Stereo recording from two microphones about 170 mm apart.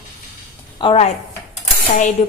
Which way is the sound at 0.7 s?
30° left (ahead or behind).